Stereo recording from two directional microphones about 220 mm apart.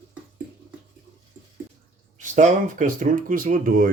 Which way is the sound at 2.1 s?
35° right (ahead or behind).